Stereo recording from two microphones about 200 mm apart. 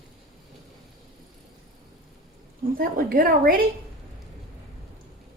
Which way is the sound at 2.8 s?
45° right (ahead or behind).